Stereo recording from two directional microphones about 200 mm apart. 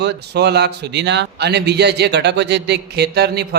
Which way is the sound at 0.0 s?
55° right (ahead or behind).